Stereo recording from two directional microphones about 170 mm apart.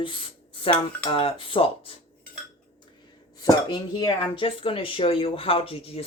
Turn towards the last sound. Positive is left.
turn(degrees=35)  # may be behind; listen again after turning